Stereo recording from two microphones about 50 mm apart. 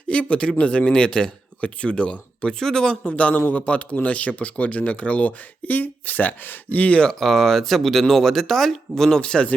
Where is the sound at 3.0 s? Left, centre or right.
Left.